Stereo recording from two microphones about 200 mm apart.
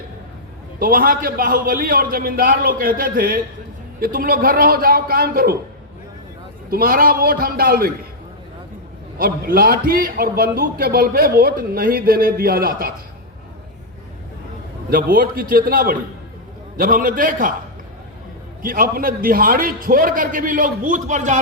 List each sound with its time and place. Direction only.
0.8 s a man's voice: 45° right (ahead or behind)
6.7 s a man's voice: 45° right (ahead or behind)
9.1 s a man's voice: 45° right (ahead or behind)
14.8 s a man's voice: 45° right (ahead or behind)
18.6 s a man's voice: 45° right (ahead or behind)